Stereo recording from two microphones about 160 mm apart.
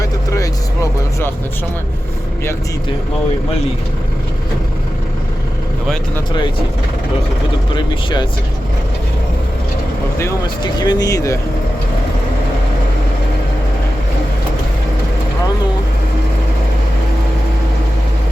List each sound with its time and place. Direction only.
0.0 s vehicle: 20° left (ahead or behind)
7.7 s speech: 30° left (ahead or behind)
10.8 s speech: 25° left (ahead or behind)